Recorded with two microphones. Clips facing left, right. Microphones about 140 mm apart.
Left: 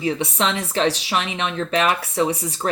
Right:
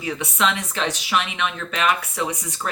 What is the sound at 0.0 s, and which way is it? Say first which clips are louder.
Speech: left 2 dB; 30° left (ahead or behind).